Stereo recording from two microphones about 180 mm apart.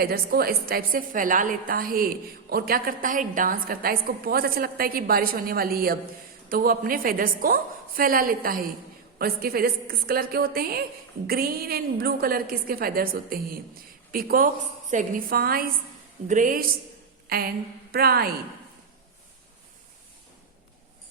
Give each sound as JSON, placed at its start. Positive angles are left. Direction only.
{"t": 0.0, "sound": "a woman's voice", "side_deg": -55}
{"t": 17.2, "sound": "a sound", "side_deg": -55}
{"t": 17.9, "sound": "a woman's voice", "side_deg": -60}